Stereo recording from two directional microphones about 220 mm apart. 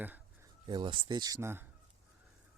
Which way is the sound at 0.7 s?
20° right (ahead or behind).